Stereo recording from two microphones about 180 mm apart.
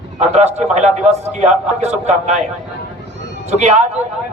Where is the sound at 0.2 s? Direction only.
35° right (ahead or behind).